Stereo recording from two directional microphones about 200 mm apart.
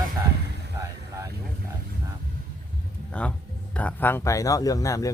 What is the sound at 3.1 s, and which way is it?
Speech, 5° left (ahead or behind).